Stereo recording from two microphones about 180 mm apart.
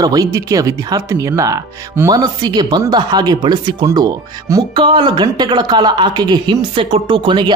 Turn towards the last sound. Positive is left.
turn(degrees=-25)  # may be behind; listen again after turning